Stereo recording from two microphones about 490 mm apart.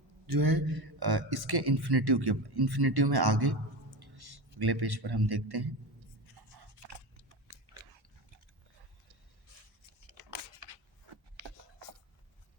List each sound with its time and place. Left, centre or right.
0.3 s speech: right
6.3 s a sound: right
7.4 s biting: right
11.4 s writing: right